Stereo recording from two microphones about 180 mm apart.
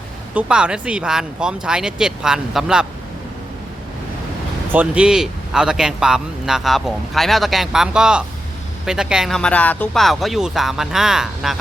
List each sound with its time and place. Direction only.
0.3 s speech: 5° right (ahead or behind)
4.7 s speech: 10° right (ahead or behind)